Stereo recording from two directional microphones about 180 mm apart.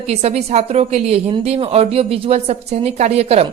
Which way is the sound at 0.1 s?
35° right (ahead or behind).